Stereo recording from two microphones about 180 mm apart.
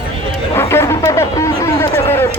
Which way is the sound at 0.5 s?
15° left (ahead or behind).